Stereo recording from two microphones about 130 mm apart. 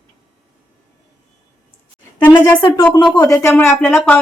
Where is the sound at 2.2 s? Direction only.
15° left (ahead or behind).